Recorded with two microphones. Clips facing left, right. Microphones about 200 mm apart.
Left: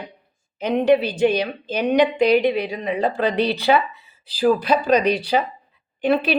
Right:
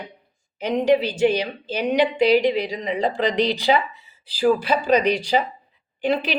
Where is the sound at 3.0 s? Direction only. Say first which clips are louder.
Left 1 dB; 15° right (ahead or behind).